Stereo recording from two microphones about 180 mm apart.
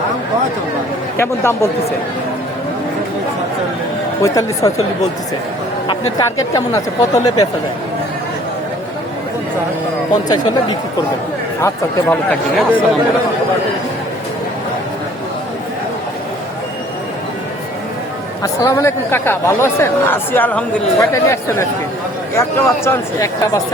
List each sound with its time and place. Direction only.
1.1 s speech: 15° left (ahead or behind)
4.2 s speech: 15° left (ahead or behind)
5.9 s speech: 20° left (ahead or behind)
10.2 s speech: 25° left (ahead or behind)
12.0 s speech: 5° left (ahead or behind)
18.4 s speech: 15° left (ahead or behind)